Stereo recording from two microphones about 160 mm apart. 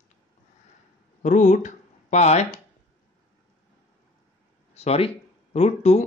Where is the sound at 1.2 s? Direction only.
50° left (ahead or behind).